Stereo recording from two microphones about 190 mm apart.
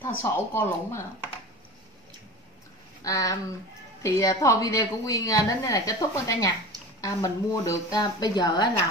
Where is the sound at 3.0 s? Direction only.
20° left (ahead or behind).